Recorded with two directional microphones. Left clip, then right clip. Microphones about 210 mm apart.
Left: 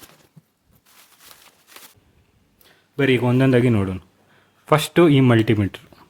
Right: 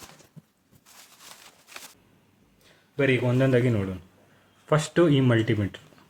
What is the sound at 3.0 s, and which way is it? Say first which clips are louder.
Speech: left 5 dB; 45° left (ahead or behind).